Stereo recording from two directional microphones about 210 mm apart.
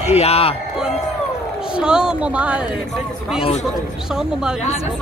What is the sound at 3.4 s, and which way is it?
Speech, 30° left (ahead or behind).